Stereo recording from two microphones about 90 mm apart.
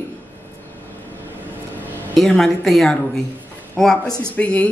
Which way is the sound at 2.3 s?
5° left (ahead or behind).